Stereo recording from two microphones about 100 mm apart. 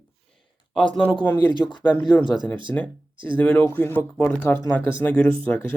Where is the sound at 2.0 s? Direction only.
50° left (ahead or behind).